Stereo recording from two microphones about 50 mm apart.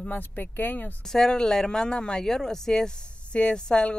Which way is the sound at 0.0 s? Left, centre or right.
Left.